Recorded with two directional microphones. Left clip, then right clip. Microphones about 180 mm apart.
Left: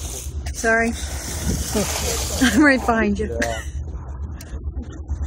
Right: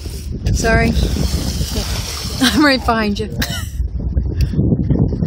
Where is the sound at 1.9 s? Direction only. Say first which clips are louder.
Even; 20° left (ahead or behind).